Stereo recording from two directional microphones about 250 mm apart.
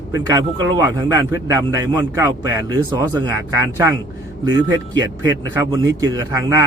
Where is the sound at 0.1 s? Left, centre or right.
Centre.